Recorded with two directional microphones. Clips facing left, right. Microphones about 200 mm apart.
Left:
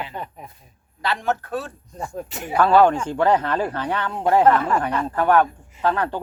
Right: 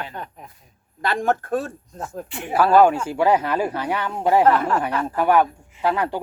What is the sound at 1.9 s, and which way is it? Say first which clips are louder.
Speech: left 4 dB; centre (ahead or behind).